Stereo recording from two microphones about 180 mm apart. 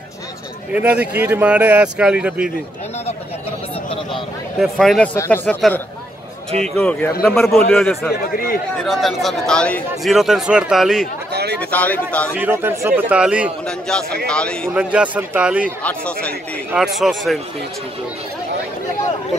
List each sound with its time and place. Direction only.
0.7 s speech: 5° right (ahead or behind)
4.6 s speech: centre (ahead or behind)
5.1 s speech: 15° left (ahead or behind); by 11.1 s 5° right (ahead or behind)
11.3 s a sound: 65° right (ahead or behind)
11.7 s speech: 10° left (ahead or behind)
12.4 s speech: 10° right (ahead or behind)
13.7 s speech: 5° left (ahead or behind)
14.7 s speech: 5° right (ahead or behind)
15.8 s speech: 5° left (ahead or behind)